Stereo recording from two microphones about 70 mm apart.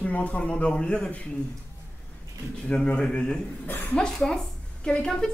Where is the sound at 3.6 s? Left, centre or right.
Left.